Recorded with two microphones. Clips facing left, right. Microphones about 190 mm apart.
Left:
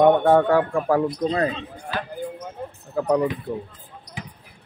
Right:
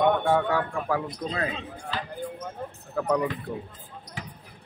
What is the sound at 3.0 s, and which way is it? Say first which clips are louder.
Speech: left 4 dB; 25° left (ahead or behind).